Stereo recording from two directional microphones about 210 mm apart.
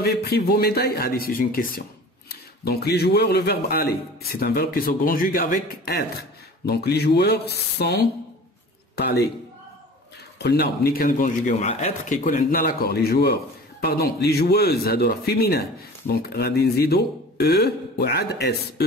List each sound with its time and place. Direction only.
0.0 s a man's voice: 50° left (ahead or behind)
10.4 s speech: 50° left (ahead or behind)